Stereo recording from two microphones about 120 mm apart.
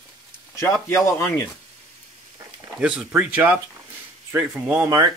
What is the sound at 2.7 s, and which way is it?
Speech, 10° right (ahead or behind).